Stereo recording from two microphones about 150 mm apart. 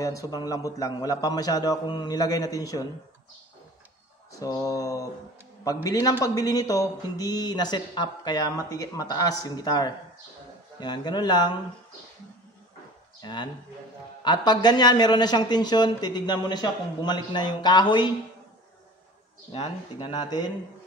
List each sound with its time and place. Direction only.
0.0 s a man's voice: 20° left (ahead or behind)
4.4 s a man's voice: 20° left (ahead or behind)
13.2 s a man's voice: 30° left (ahead or behind)
19.5 s a man's voice: 30° left (ahead or behind)